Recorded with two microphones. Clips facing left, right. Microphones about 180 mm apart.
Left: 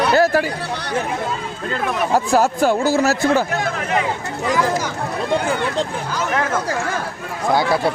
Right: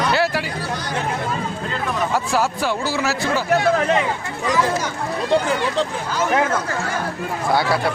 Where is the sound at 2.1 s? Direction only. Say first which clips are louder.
Left 7 dB; 45° left (ahead or behind).